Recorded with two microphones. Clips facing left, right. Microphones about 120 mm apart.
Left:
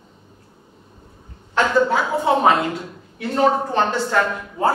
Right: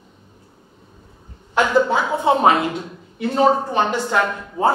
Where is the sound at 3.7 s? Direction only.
15° right (ahead or behind).